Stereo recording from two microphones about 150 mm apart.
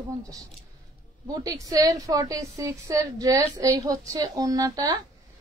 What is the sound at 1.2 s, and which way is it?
A woman's voice, 25° right (ahead or behind).